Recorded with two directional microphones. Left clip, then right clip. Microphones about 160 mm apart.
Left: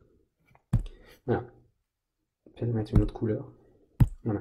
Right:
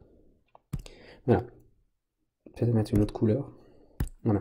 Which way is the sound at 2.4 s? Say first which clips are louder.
Right 4 dB; 45° right (ahead or behind).